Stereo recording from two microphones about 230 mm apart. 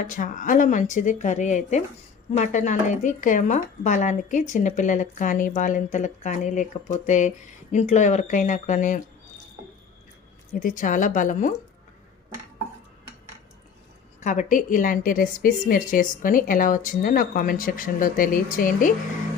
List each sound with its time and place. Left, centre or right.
0.0 s speech: left
10.5 s speech: left
14.2 s speech: left